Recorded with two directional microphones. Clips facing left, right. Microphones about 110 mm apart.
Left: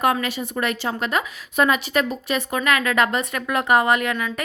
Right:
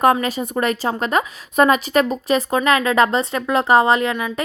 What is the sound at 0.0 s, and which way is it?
A woman's voice, 40° right (ahead or behind).